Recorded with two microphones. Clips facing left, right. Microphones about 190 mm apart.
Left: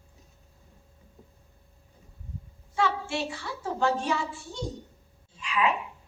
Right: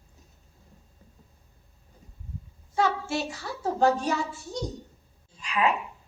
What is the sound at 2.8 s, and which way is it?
A child's voice, 40° right (ahead or behind).